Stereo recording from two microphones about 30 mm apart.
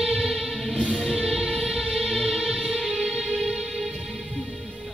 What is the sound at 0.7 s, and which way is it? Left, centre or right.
Music, left.